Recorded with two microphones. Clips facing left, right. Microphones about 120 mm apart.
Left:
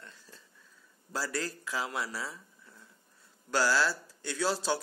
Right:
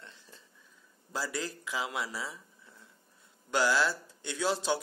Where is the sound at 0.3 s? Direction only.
20° right (ahead or behind).